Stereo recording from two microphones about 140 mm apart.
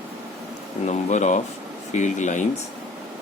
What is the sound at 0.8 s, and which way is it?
Speech, 55° left (ahead or behind).